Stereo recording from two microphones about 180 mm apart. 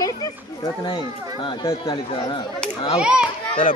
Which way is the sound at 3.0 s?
5° right (ahead or behind).